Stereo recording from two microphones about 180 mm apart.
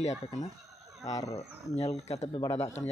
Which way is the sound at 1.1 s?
20° left (ahead or behind).